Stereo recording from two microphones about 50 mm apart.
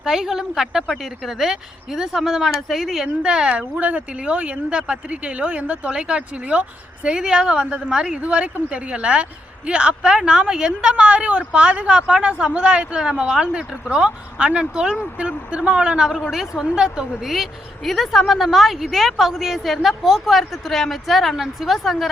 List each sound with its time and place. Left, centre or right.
0.0 s a woman's voice: centre
16.1 s a woman's voice: centre